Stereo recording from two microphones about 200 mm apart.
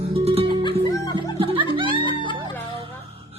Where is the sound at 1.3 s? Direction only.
25° right (ahead or behind).